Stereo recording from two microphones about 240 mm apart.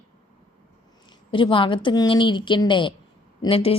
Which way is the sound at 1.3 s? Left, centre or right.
Left.